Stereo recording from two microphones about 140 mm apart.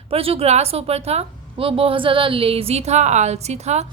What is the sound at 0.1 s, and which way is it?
A woman's voice, 45° right (ahead or behind).